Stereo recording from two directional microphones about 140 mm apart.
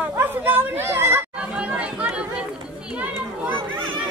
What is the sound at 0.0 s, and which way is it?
Chatter, 15° right (ahead or behind).